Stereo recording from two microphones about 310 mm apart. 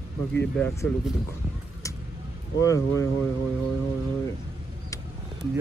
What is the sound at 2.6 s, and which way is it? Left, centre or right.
Speech, centre.